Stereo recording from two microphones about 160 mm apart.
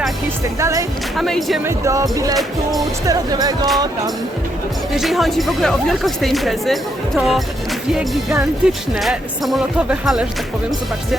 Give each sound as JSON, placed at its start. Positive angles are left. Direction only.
{"t": 0.6, "sound": "speech", "side_deg": -20}
{"t": 1.1, "sound": "speech", "side_deg": 0}
{"t": 1.6, "sound": "speech", "side_deg": -20}
{"t": 4.9, "sound": "speech", "side_deg": 0}
{"t": 8.6, "sound": "speech", "side_deg": 0}